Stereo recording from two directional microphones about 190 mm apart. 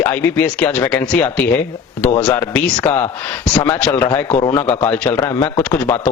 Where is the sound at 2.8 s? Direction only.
15° left (ahead or behind).